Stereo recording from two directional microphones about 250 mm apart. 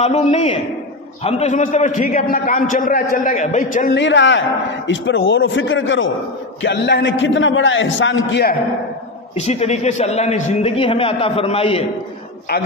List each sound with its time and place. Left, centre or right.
0.0 s a man's voice: left
9.3 s a man's voice: left